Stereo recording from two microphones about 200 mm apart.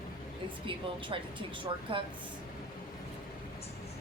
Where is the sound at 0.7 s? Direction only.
25° right (ahead or behind).